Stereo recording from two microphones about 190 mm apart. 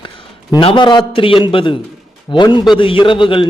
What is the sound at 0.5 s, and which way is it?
A man's voice, 25° left (ahead or behind).